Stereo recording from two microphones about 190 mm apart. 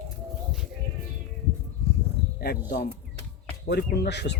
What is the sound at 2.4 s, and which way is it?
Speech, 55° left (ahead or behind).